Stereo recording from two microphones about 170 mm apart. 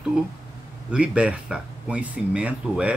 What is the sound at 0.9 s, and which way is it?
Speech, 5° right (ahead or behind).